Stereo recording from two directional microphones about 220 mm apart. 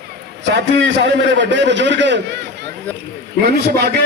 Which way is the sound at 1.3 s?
55° right (ahead or behind).